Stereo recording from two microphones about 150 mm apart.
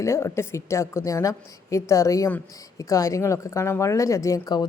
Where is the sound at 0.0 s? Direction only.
20° left (ahead or behind).